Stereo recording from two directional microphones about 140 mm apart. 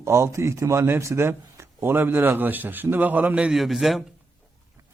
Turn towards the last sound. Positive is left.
turn(degrees=0)  # may be behind; listen again after turning